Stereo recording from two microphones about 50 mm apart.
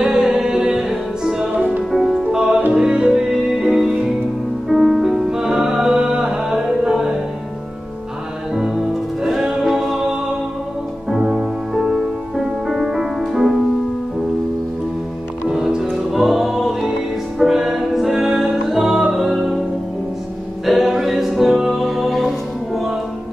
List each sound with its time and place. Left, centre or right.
0.0 s music: centre
2.2 s music: centre
9.2 s music: centre
11.1 s music: centre
15.4 s music: centre
20.6 s music: centre